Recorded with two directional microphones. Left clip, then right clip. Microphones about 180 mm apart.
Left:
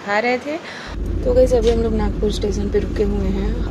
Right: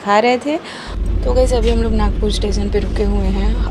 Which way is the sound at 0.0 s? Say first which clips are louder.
Right 6 dB; 25° right (ahead or behind).